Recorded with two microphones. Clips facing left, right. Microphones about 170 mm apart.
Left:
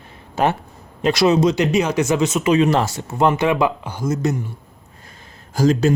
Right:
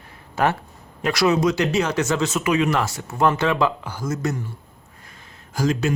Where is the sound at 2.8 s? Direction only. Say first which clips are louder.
Left 3 dB; 20° left (ahead or behind).